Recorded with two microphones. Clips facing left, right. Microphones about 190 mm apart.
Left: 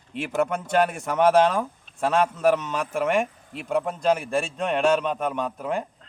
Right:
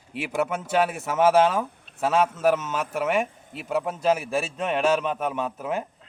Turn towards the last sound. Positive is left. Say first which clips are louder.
# left 1 dB
turn(degrees=-5)  # may be behind; listen again after turning